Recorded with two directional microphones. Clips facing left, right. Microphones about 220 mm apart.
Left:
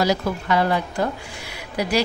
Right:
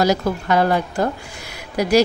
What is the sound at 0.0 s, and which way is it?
Speech, 45° right (ahead or behind).